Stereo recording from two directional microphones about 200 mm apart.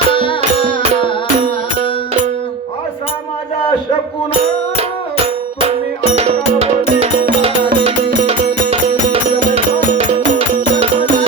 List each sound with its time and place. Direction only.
0.1 s music: 25° left (ahead or behind)
4.8 s music: 30° right (ahead or behind)
10.1 s music: 35° right (ahead or behind)